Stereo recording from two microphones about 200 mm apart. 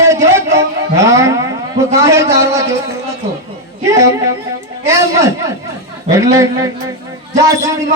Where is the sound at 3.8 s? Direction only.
15° right (ahead or behind).